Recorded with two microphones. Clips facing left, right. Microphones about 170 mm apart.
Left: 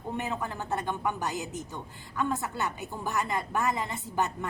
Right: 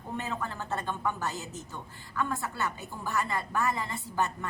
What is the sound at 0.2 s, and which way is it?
A woman's voice, 15° left (ahead or behind).